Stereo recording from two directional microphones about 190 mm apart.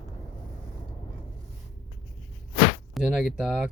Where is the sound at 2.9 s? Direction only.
5° right (ahead or behind).